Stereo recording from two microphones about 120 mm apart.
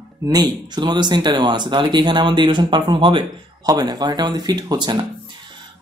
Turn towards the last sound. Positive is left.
turn(degrees=-35)  # may be behind; listen again after turning